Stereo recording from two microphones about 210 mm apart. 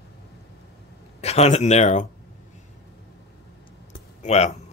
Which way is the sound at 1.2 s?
30° left (ahead or behind).